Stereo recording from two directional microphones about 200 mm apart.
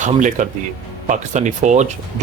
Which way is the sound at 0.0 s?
40° right (ahead or behind).